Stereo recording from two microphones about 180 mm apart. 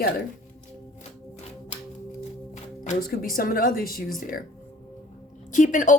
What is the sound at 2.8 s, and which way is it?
Speech, 45° left (ahead or behind).